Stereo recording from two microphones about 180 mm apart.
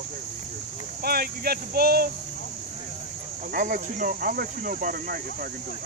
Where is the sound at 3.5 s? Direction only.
50° right (ahead or behind).